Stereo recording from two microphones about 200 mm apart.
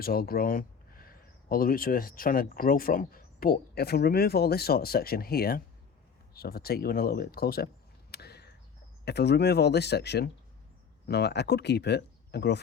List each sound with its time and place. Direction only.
0.0 s speech: 50° left (ahead or behind)
8.1 s a sound: 55° left (ahead or behind)
9.0 s speech: 55° left (ahead or behind)